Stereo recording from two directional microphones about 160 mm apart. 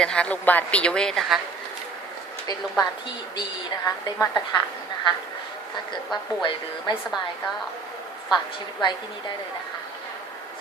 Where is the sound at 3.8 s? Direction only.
20° left (ahead or behind).